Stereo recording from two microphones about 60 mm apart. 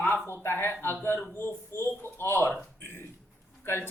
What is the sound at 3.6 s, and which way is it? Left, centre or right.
Speech, left.